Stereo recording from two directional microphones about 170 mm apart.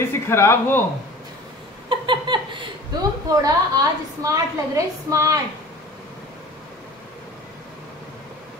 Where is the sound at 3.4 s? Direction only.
20° right (ahead or behind).